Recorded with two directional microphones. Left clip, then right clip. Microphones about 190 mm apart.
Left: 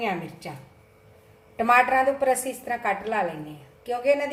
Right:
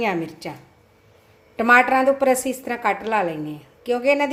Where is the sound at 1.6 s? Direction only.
55° right (ahead or behind).